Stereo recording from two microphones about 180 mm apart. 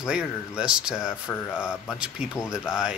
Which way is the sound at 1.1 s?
15° left (ahead or behind).